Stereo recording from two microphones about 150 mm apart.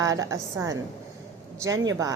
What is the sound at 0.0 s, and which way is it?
A woman's voice, 25° right (ahead or behind).